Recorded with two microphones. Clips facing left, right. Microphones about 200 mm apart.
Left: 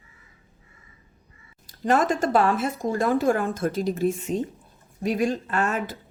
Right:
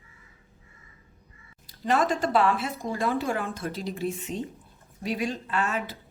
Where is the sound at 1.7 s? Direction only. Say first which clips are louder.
Left 3 dB; 50° left (ahead or behind).